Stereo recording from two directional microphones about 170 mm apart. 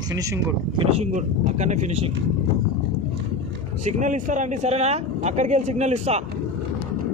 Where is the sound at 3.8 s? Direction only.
45° right (ahead or behind).